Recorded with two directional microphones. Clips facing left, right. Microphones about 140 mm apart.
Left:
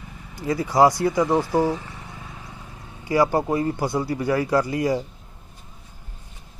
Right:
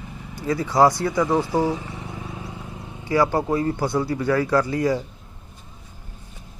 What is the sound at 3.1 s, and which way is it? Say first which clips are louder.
Speech: even; 15° left (ahead or behind).